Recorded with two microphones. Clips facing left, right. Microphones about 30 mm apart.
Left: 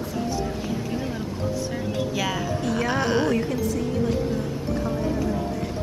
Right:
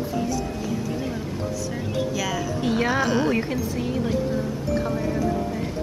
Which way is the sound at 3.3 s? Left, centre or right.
Right.